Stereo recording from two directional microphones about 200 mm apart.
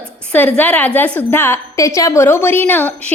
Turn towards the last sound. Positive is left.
turn(degrees=10)  # may be behind; listen again after turning